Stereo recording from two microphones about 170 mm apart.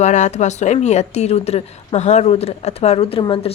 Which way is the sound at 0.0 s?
45° left (ahead or behind).